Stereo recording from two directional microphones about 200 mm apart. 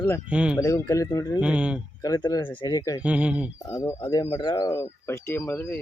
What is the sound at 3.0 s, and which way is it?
Speech, 5° right (ahead or behind).